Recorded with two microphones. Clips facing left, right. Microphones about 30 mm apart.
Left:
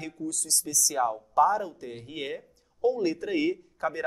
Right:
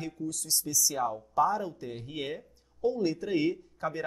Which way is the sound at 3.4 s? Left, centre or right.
Centre.